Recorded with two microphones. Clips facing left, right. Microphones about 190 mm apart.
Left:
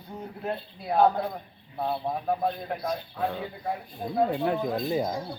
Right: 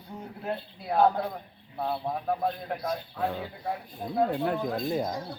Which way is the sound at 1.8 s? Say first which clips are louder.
Left 1 dB; 15° left (ahead or behind).